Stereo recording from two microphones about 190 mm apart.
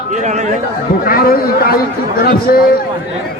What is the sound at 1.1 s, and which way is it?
Speech, 50° left (ahead or behind).